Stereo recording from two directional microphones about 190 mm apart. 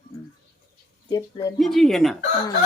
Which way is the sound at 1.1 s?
20° left (ahead or behind).